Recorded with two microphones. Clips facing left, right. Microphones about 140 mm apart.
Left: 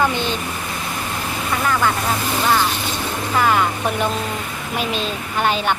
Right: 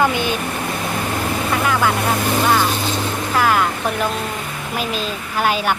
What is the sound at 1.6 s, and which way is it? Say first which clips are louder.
Speech: even; 5° right (ahead or behind).